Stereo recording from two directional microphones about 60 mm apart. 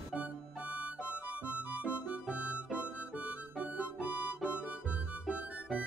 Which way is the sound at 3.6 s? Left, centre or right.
Right.